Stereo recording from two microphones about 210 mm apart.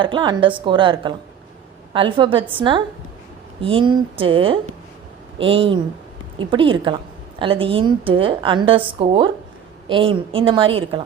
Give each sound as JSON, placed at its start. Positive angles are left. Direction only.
{"t": 0.0, "sound": "a woman's voice", "side_deg": -20}
{"t": 3.6, "sound": "a woman's voice", "side_deg": -25}